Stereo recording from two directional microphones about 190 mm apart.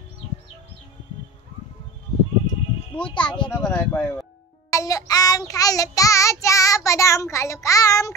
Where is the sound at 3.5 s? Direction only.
10° left (ahead or behind).